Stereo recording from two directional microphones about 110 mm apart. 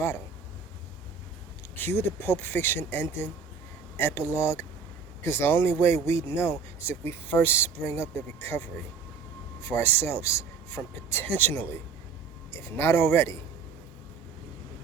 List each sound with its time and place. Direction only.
1.7 s speech: 20° left (ahead or behind)
9.6 s speech: 25° left (ahead or behind)